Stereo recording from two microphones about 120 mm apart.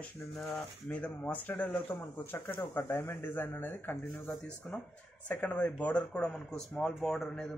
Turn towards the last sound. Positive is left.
turn(degrees=5)  # may be behind; listen again after turning